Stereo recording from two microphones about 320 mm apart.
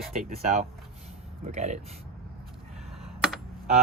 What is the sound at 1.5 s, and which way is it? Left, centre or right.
Speech, right.